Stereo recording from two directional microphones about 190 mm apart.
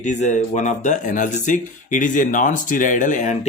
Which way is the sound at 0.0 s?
40° left (ahead or behind).